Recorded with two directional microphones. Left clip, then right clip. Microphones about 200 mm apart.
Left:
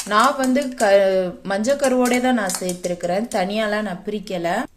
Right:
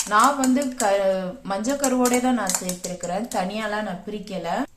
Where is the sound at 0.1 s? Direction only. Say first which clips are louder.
Left 2 dB; 45° left (ahead or behind).